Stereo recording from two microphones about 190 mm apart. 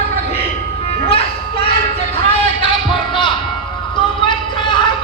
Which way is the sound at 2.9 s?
25° left (ahead or behind).